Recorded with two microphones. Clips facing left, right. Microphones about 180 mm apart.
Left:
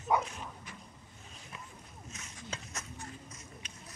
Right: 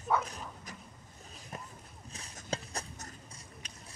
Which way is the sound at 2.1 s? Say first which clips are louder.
Right 6 dB; 35° right (ahead or behind).